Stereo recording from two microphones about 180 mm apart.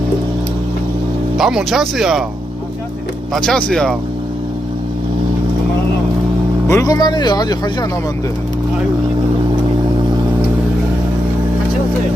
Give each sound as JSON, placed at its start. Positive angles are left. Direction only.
{"t": 1.4, "sound": "speech", "side_deg": -5}
{"t": 3.3, "sound": "speech", "side_deg": 5}
{"t": 6.7, "sound": "speech", "side_deg": 20}